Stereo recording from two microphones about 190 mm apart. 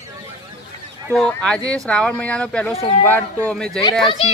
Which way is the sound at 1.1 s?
5° left (ahead or behind).